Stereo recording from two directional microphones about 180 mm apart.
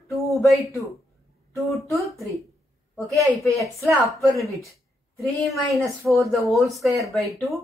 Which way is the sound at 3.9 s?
5° right (ahead or behind).